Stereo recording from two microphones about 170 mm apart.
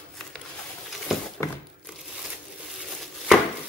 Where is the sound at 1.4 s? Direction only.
20° left (ahead or behind).